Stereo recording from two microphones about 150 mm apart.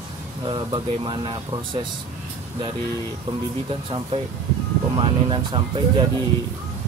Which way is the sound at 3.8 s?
35° right (ahead or behind).